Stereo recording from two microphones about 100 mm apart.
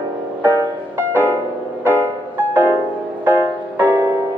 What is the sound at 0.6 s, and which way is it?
Music, 20° right (ahead or behind).